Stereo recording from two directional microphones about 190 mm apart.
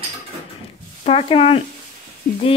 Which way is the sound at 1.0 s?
30° left (ahead or behind).